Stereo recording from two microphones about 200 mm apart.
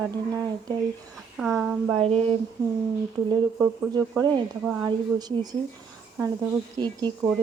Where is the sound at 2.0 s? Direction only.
30° right (ahead or behind).